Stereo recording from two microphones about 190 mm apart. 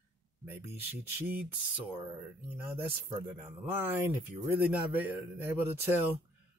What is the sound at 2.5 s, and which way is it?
Speech, 10° right (ahead or behind).